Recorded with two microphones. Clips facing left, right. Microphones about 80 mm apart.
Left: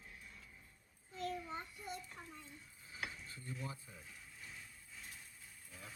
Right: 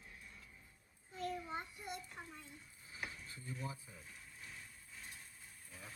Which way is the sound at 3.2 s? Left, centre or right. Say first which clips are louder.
Right 1 dB; right.